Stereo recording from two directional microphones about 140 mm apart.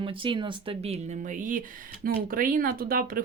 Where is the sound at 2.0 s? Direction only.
85° right.